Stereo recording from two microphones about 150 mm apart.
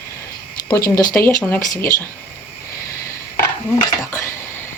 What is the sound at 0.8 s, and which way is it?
Speech, 75° left (ahead or behind).